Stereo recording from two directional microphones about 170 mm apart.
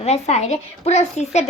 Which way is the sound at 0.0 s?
40° left (ahead or behind).